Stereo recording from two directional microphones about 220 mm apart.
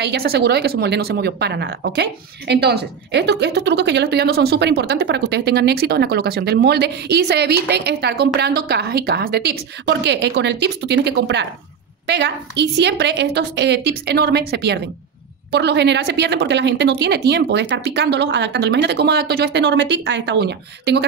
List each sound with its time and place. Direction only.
0.0 s speech: 45° right (ahead or behind)